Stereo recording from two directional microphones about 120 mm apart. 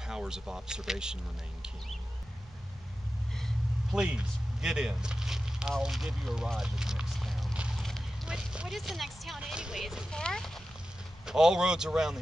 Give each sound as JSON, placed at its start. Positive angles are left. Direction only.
{"t": 0.0, "sound": "speech", "side_deg": -5}
{"t": 3.3, "sound": "vehicle", "side_deg": 0}
{"t": 4.0, "sound": "speech", "side_deg": -5}
{"t": 7.5, "sound": "a sound", "side_deg": -10}
{"t": 7.8, "sound": "speech", "side_deg": 0}
{"t": 10.1, "sound": "speech", "side_deg": 5}